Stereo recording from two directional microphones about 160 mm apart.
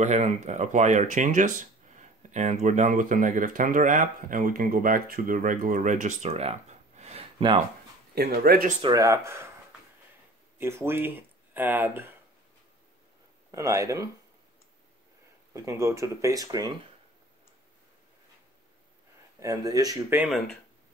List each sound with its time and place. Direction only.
0.0 s speech: 45° right (ahead or behind)
8.1 s speech: 80° right
8.8 s speech: 20° right (ahead or behind)
10.6 s speech: 15° right (ahead or behind)
13.5 s speech: 20° right (ahead or behind)
15.5 s speech: 20° right (ahead or behind)
19.4 s speech: 25° right (ahead or behind)
20.2 s speech: centre (ahead or behind)